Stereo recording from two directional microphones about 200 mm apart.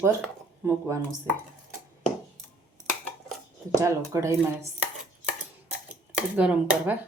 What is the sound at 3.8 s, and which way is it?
Speech, 15° right (ahead or behind).